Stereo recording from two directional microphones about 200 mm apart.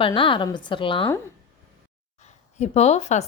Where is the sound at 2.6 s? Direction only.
30° left (ahead or behind).